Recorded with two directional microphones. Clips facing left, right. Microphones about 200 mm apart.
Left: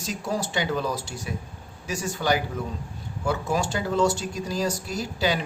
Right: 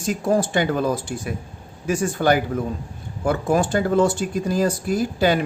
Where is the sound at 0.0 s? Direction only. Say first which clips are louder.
Right 8 dB; 50° right (ahead or behind).